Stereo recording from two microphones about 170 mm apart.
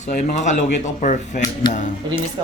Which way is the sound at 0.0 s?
45° left (ahead or behind).